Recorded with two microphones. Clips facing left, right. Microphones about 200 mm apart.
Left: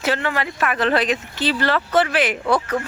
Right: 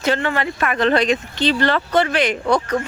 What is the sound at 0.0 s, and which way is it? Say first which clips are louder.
Speech: right 2 dB; 5° left (ahead or behind).